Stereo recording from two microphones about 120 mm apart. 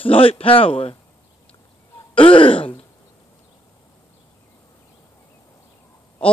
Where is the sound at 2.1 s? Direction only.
45° left (ahead or behind).